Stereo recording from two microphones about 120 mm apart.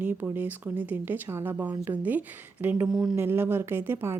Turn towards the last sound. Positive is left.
turn(degrees=-20)  # may be behind; listen again after turning